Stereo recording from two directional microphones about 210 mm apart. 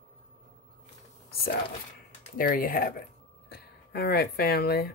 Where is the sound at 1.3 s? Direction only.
45° left (ahead or behind).